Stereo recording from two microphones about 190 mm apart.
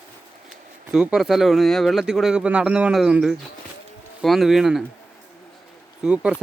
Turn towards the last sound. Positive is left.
turn(degrees=-5)  # may be behind; listen again after turning